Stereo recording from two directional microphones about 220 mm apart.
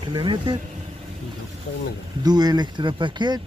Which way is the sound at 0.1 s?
20° right (ahead or behind).